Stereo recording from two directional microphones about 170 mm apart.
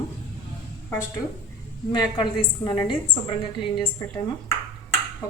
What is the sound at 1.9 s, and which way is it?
A woman's voice, 25° left (ahead or behind).